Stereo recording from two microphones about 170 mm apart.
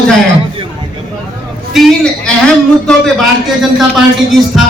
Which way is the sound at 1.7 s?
Centre (ahead or behind).